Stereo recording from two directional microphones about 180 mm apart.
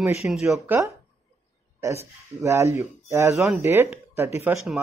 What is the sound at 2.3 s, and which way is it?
Speech, 15° right (ahead or behind).